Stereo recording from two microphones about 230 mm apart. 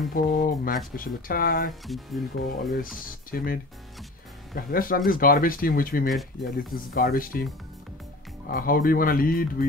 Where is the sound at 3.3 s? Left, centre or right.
Left.